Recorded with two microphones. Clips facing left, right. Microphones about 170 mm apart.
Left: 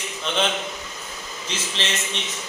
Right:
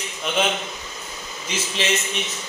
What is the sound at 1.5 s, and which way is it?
Speech, 10° right (ahead or behind).